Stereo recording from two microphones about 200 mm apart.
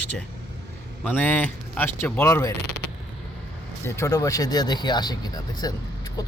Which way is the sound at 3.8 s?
15° left (ahead or behind).